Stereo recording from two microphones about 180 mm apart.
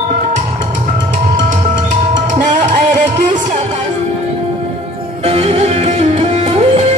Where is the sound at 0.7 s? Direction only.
45° right (ahead or behind).